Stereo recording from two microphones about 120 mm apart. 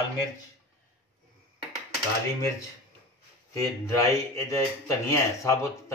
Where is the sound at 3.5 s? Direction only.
25° left (ahead or behind).